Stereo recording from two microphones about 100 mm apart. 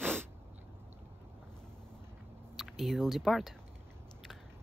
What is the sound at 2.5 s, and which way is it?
Speech, centre (ahead or behind).